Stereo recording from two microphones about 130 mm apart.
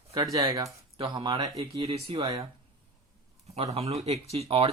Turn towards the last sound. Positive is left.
turn(degrees=-45)  # may be behind; listen again after turning